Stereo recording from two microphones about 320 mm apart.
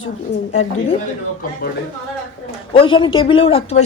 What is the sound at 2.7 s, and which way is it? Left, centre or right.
Speech, centre.